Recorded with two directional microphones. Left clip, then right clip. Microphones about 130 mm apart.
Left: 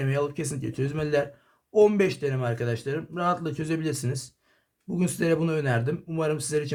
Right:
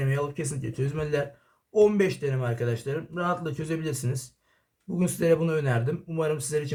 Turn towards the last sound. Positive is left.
turn(degrees=40)  # may be behind; listen again after turning